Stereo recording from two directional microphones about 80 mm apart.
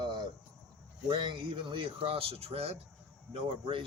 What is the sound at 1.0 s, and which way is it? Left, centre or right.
Speech, right.